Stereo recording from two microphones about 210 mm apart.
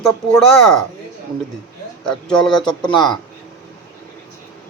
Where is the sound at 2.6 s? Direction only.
20° left (ahead or behind).